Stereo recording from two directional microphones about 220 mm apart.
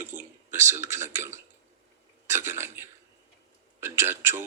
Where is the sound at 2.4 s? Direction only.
10° right (ahead or behind).